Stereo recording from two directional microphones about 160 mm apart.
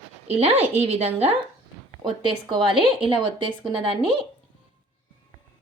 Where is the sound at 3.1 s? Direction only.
35° right (ahead or behind).